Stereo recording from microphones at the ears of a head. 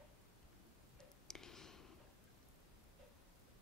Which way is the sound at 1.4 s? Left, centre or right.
Left.